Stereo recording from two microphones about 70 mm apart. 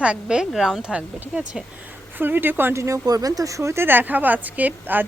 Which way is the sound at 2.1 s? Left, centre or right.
Right.